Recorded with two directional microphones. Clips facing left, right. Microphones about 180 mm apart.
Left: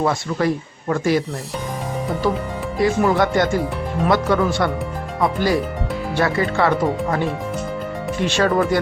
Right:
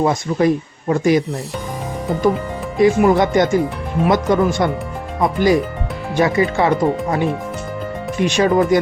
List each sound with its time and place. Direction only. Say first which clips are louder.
0.0 s speech: right 4 dB; 20° right (ahead or behind)
2.7 s speech: right 5 dB; 20° right (ahead or behind)